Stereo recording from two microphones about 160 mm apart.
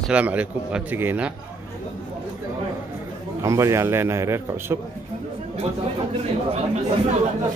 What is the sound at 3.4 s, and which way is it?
A man's voice, 20° right (ahead or behind).